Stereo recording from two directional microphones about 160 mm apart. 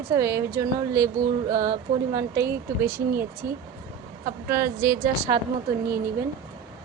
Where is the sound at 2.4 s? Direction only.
75° right (ahead or behind).